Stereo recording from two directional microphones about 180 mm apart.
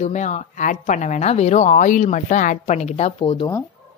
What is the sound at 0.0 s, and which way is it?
Speech, 40° left (ahead or behind).